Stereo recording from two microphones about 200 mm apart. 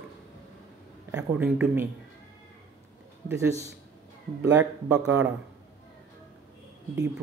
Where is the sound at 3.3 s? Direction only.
15° right (ahead or behind).